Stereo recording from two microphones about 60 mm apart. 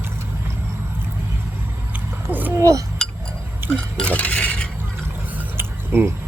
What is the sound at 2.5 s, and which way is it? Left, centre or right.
Cutlery, right.